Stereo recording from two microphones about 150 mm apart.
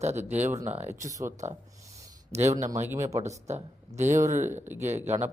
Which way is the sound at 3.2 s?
50° right (ahead or behind).